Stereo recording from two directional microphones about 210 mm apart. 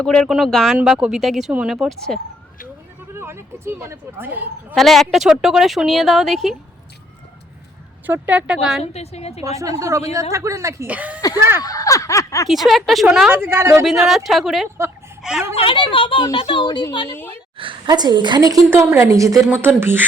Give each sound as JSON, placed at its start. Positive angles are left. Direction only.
{"t": 0.0, "sound": "speech", "side_deg": 5}
{"t": 3.1, "sound": "speech", "side_deg": -10}
{"t": 4.7, "sound": "speech", "side_deg": 0}
{"t": 8.0, "sound": "speech", "side_deg": -10}
{"t": 8.8, "sound": "speech", "side_deg": 30}
{"t": 9.4, "sound": "speech", "side_deg": -15}
{"t": 11.6, "sound": "snicker", "side_deg": 15}
{"t": 12.5, "sound": "speech", "side_deg": 0}
{"t": 14.3, "sound": "a woman's voice", "side_deg": 0}
{"t": 15.5, "sound": "speech", "side_deg": 25}
{"t": 17.1, "sound": "snicker", "side_deg": 10}
{"t": 17.6, "sound": "a woman's voice", "side_deg": -20}